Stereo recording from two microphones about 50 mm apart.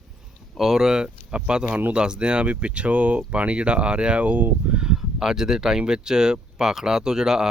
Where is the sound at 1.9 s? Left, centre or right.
Centre.